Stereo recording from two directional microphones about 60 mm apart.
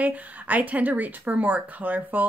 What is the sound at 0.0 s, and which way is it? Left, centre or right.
Speech, right.